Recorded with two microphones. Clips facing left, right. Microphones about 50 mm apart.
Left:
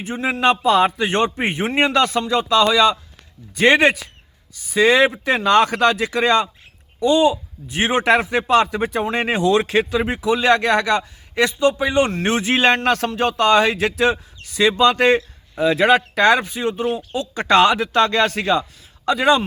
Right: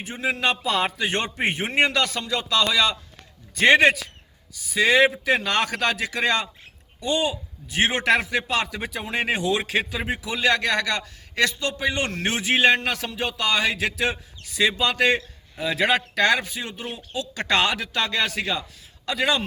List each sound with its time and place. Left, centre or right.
0.0 s a man's voice: left
7.7 s a man's voice: left
19.0 s a man's voice: left